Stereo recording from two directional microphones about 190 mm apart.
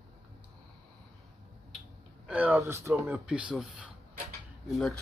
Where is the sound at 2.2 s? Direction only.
10° right (ahead or behind).